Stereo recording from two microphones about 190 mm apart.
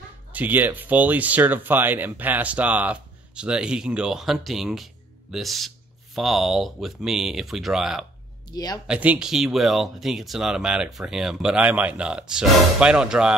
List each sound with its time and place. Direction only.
0.3 s speech: 10° right (ahead or behind)
8.5 s speech: 20° left (ahead or behind)
8.8 s speech: 5° right (ahead or behind)